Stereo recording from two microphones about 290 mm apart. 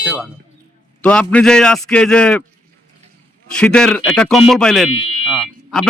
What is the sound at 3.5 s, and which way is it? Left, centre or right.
A man's voice, centre.